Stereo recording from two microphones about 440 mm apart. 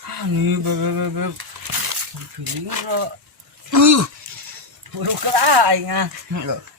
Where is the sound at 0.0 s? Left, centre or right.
Right.